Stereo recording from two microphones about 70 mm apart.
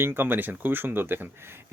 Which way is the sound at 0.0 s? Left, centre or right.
Right.